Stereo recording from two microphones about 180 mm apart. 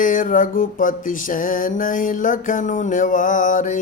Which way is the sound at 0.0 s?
50° left (ahead or behind).